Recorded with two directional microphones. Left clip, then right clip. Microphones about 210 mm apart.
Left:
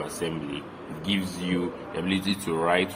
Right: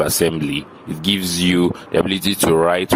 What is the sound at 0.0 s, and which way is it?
Speech, 55° right (ahead or behind).